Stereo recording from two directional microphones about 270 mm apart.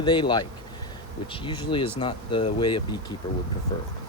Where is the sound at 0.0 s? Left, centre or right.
Centre.